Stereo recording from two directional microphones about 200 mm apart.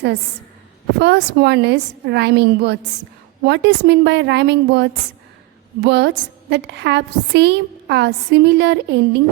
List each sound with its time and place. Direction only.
0.9 s a woman's voice: 60° right (ahead or behind)